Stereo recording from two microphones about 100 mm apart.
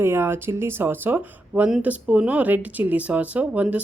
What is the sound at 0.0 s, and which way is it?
Speech, 25° right (ahead or behind).